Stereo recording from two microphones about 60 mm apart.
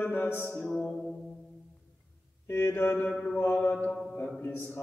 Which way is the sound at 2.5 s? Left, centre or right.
Left.